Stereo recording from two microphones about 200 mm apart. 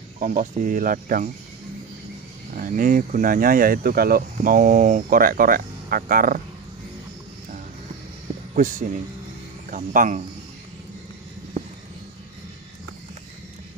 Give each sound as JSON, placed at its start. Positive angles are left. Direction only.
{"t": 0.2, "sound": "speech", "side_deg": -40}
{"t": 2.5, "sound": "speech", "side_deg": -45}
{"t": 8.5, "sound": "speech", "side_deg": -40}